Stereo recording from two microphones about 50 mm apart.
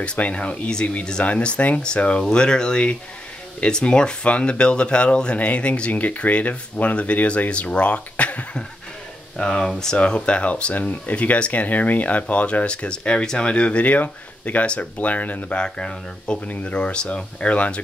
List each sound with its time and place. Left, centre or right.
0.0 s speech: left
9.4 s speech: centre; by 15.4 s left
15.5 s speech: centre